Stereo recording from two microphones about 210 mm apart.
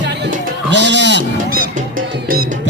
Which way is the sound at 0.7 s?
55° right (ahead or behind).